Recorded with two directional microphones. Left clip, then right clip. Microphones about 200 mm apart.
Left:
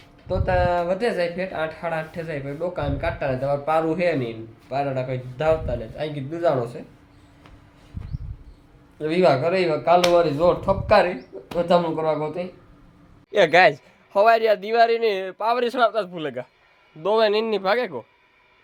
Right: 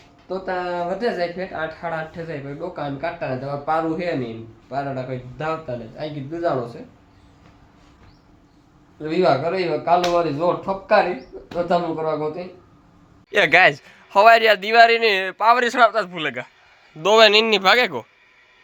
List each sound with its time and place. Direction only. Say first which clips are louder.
0.3 s a man's voice: left 4 dB; 5° left (ahead or behind)
9.0 s a man's voice: even; 5° left (ahead or behind)
13.3 s speech: right 1 dB; centre (ahead or behind)
16.1 s a man's voice: right 4 dB; 15° left (ahead or behind)
17.0 s speech: right 6 dB; centre (ahead or behind)